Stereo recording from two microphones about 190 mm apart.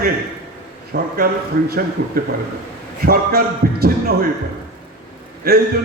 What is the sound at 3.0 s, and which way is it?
Speech, 50° right (ahead or behind).